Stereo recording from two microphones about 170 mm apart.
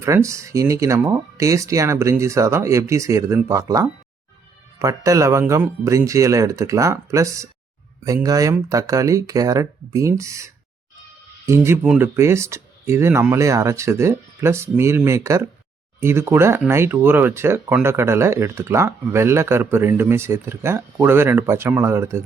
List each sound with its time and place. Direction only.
0.0 s speech: 15° right (ahead or behind)